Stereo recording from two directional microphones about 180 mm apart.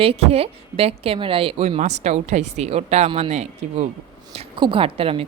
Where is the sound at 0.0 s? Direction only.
35° right (ahead or behind).